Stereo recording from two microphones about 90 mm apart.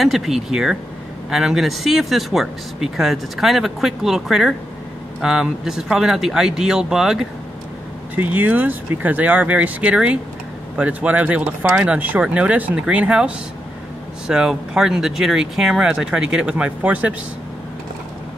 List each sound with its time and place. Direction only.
0.0 s speech: 5° right (ahead or behind)
8.2 s speech: 20° right (ahead or behind)